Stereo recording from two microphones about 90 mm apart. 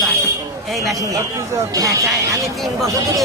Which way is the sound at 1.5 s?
30° right (ahead or behind).